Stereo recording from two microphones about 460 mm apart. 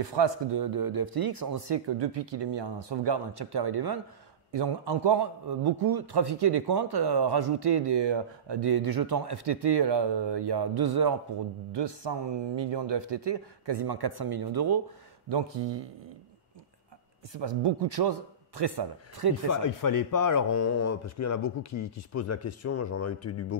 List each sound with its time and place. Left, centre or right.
0.0 s a man's voice: right
11.7 s a man's voice: right
15.2 s a man's voice: right
17.3 s a man's voice: right
19.5 s speech: left